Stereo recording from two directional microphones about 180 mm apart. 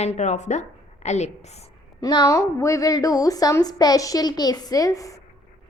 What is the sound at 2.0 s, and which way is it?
A woman's voice, 20° left (ahead or behind).